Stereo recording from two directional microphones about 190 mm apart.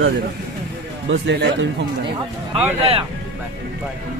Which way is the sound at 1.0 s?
75° right (ahead or behind).